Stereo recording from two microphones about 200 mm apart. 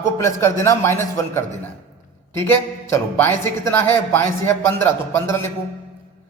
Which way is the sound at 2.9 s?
10° left (ahead or behind).